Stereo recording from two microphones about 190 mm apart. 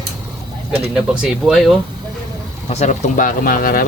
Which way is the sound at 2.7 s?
35° left (ahead or behind).